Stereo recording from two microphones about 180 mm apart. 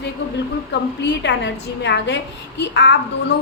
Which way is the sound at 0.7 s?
75° left (ahead or behind).